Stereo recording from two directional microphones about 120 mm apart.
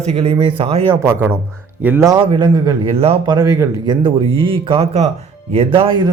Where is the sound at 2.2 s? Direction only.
45° right (ahead or behind).